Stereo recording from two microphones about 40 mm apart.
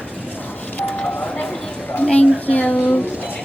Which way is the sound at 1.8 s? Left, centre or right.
Left.